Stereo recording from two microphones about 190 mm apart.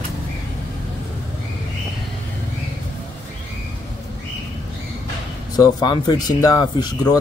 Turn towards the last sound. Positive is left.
turn(degrees=20)  # may be behind; listen again after turning